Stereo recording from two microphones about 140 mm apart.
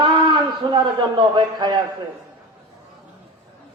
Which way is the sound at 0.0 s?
35° right (ahead or behind).